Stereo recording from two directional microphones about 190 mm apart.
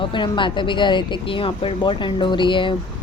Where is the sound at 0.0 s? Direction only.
25° left (ahead or behind).